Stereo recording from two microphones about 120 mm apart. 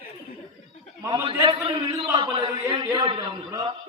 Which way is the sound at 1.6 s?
45° right (ahead or behind).